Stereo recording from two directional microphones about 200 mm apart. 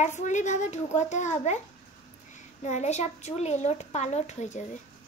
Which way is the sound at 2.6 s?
35° left (ahead or behind).